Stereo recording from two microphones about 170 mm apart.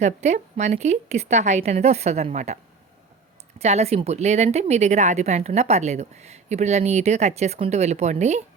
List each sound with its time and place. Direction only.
0.0 s a woman's voice: 40° right (ahead or behind)
3.6 s a woman's voice: 40° right (ahead or behind)